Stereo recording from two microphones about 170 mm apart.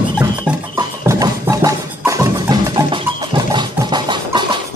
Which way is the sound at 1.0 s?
20° right (ahead or behind).